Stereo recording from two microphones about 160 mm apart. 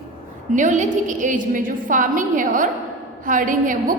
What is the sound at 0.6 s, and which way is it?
A woman's voice, 50° right (ahead or behind).